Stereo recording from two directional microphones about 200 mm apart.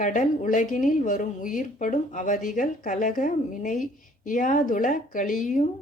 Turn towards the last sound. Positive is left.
turn(degrees=40)  # may be behind; listen again after turning